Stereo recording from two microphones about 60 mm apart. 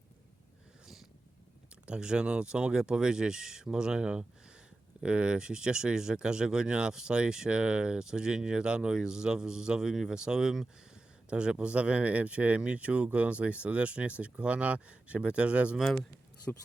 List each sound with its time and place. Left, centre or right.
1.9 s speech: centre
15.8 s speech: centre
16.5 s speech: left